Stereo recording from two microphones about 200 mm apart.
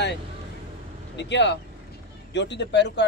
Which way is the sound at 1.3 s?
60° left (ahead or behind).